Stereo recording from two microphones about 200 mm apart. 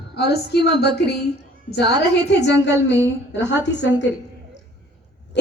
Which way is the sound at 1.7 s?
60° left (ahead or behind).